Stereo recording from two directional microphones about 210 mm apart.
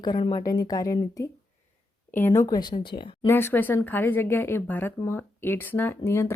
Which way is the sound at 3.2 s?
10° left (ahead or behind).